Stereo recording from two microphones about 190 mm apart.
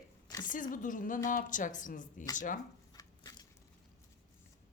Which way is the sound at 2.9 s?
20° left (ahead or behind).